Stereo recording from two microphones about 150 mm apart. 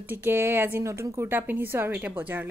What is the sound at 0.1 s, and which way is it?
Speech, 15° right (ahead or behind).